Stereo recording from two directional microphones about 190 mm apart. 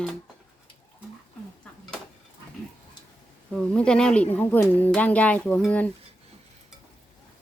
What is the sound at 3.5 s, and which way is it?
A woman's voice, 5° left (ahead or behind).